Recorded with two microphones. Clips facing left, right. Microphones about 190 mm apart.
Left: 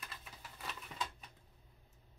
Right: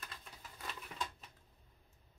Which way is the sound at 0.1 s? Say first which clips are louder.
Even; 5° left (ahead or behind).